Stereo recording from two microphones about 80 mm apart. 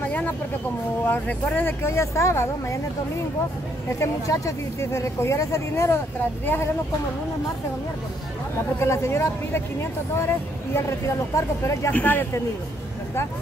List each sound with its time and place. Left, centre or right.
1.0 s speech: left
4.0 s speech: left
6.4 s speech: left
8.7 s speech: left
11.9 s speech: left